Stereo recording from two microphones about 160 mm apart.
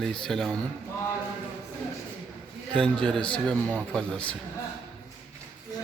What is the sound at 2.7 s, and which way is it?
A man's voice, 5° left (ahead or behind).